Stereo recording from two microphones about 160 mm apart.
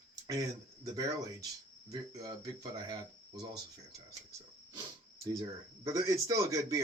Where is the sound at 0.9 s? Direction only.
20° right (ahead or behind).